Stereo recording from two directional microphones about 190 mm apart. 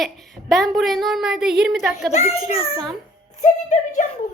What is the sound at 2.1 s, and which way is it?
A woman's voice, 35° left (ahead or behind).